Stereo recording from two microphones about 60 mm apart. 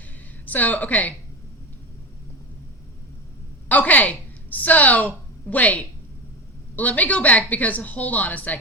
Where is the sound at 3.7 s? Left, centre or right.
Left.